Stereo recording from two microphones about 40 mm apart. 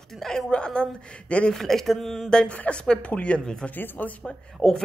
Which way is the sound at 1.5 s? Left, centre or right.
Centre.